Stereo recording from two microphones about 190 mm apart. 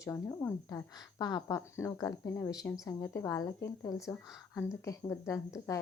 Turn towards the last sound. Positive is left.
turn(degrees=15)  # may be behind; listen again after turning